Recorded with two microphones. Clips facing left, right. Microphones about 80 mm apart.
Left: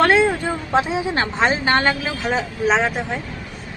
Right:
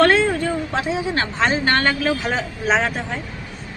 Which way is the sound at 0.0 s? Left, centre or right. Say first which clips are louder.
Even; centre.